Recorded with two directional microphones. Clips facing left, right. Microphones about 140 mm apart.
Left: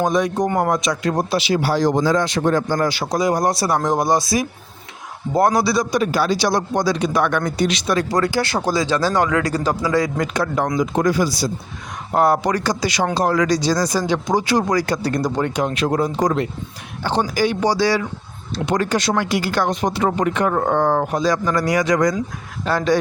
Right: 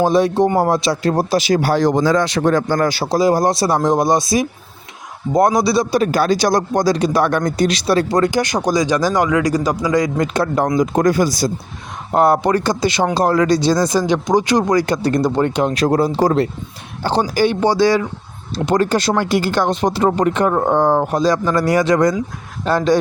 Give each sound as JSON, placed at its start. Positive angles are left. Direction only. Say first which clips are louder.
{"t": 0.0, "sound": "speech", "louder": "right 5 dB", "side_deg": -30}
{"t": 2.0, "sound": "speech", "louder": "right 3 dB", "side_deg": -80}
{"t": 2.9, "sound": "speech", "louder": "right 4 dB", "side_deg": -30}
{"t": 6.0, "sound": "speech", "louder": "right 3 dB", "side_deg": -45}
{"t": 10.3, "sound": "speech", "louder": "right 4 dB", "side_deg": -35}
{"t": 12.1, "sound": "speech", "louder": "right 3 dB", "side_deg": -25}
{"t": 18.5, "sound": "speech", "louder": "right 4 dB", "side_deg": -35}